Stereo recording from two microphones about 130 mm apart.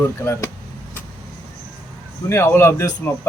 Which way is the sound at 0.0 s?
20° left (ahead or behind).